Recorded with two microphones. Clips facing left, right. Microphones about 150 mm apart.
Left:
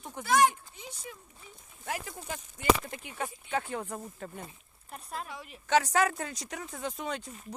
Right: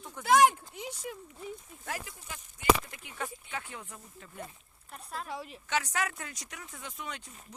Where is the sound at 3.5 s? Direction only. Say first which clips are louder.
Left 9 dB; 35° left (ahead or behind).